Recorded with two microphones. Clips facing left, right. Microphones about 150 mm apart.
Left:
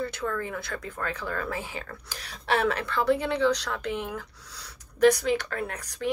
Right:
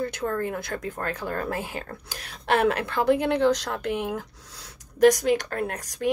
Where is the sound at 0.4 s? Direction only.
50° right (ahead or behind).